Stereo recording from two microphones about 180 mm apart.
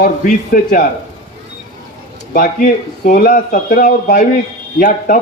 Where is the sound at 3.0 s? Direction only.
55° left (ahead or behind).